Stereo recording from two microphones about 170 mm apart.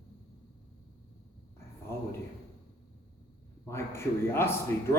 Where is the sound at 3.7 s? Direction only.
15° left (ahead or behind).